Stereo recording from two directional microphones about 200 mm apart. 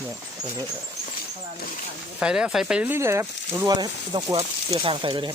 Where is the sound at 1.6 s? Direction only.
45° left (ahead or behind).